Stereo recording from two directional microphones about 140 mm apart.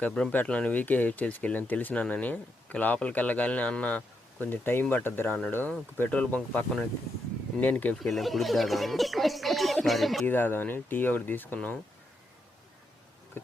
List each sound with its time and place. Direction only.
0.0 s speech: 5° left (ahead or behind)
8.1 s speech: centre (ahead or behind)
10.2 s speech: 15° left (ahead or behind)
13.4 s insect: 15° left (ahead or behind)